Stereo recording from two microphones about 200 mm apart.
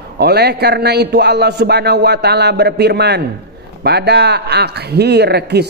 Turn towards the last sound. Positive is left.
turn(degrees=-55)  # may be behind; listen again after turning